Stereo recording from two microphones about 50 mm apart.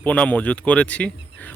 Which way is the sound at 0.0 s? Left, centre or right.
Left.